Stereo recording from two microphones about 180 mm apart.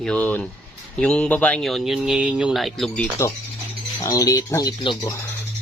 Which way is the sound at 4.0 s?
20° left (ahead or behind).